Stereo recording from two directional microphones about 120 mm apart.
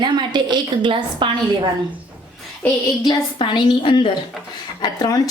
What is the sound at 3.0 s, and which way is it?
Speech, 40° left (ahead or behind).